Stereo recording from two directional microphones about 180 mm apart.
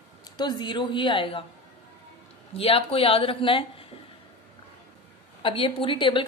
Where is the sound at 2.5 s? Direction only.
30° left (ahead or behind).